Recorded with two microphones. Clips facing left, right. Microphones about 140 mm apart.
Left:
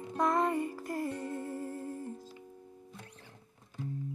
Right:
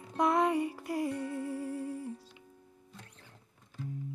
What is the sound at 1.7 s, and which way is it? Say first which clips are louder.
Music: right 3 dB; 45° left (ahead or behind).